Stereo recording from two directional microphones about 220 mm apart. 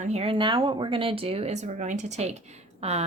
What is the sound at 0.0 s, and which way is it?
Speech, 30° right (ahead or behind).